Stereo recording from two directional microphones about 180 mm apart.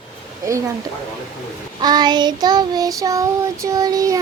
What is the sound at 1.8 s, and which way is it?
Child singing, 25° right (ahead or behind).